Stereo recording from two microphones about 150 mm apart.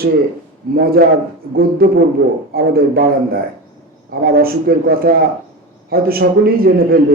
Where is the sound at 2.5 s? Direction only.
90° right.